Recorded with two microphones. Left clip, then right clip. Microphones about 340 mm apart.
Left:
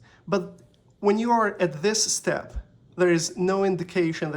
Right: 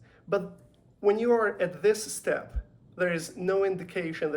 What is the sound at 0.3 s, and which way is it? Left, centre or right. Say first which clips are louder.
Speech: left 2 dB; centre.